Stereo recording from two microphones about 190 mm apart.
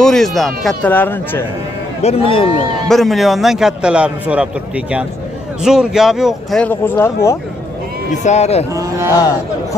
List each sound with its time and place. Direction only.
0.0 s a man's voice: centre (ahead or behind)
2.0 s a man's voice: 30° left (ahead or behind)
2.9 s a man's voice: centre (ahead or behind)
8.1 s a man's voice: 35° left (ahead or behind)
8.7 s speech: 15° right (ahead or behind)
9.1 s speech: 15° left (ahead or behind)